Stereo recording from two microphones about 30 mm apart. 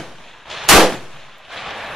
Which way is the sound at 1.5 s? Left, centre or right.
Centre.